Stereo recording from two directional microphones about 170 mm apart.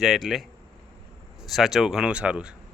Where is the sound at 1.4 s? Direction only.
Centre (ahead or behind).